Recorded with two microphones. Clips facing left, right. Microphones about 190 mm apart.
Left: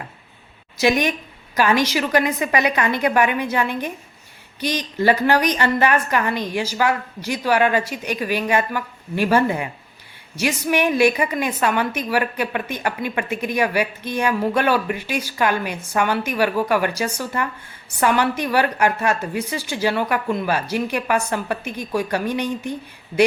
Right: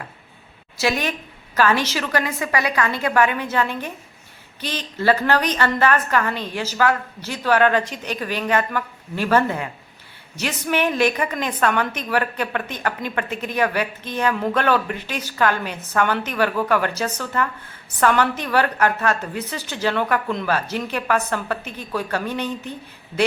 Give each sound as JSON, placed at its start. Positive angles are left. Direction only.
{"t": 0.8, "sound": "a woman's voice", "side_deg": 15}